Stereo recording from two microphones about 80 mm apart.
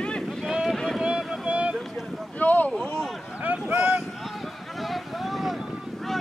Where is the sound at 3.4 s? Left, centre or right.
Centre.